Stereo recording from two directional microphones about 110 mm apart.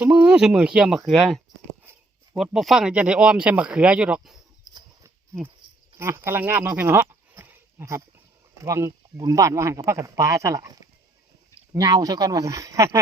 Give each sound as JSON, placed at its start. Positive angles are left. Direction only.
{"t": 0.0, "sound": "speech", "side_deg": -10}
{"t": 6.0, "sound": "speech", "side_deg": -25}